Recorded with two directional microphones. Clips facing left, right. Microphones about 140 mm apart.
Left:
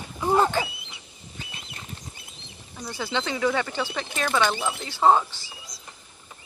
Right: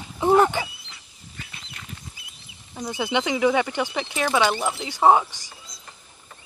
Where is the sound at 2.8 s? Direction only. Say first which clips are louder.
Right 4 dB; 15° right (ahead or behind).